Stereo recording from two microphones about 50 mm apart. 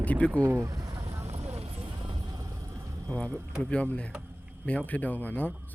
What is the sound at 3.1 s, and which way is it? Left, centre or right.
Speech, left.